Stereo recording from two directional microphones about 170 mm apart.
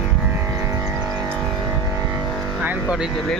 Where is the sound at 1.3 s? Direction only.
5° left (ahead or behind).